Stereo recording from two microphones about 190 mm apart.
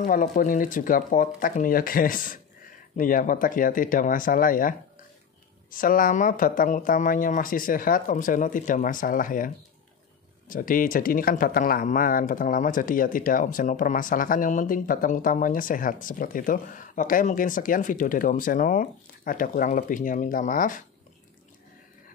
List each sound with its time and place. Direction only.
0.0 s speech: 45° left (ahead or behind)
10.5 s speech: 45° left (ahead or behind)